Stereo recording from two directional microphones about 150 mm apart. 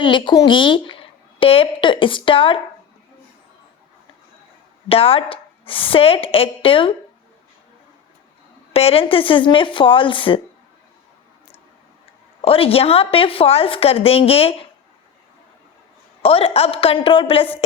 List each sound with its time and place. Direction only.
0.0 s a woman's voice: 30° left (ahead or behind)
4.9 s a woman's voice: 40° left (ahead or behind)
8.7 s a woman's voice: 40° left (ahead or behind)
12.4 s a woman's voice: 40° left (ahead or behind)
16.2 s a woman's voice: 40° left (ahead or behind)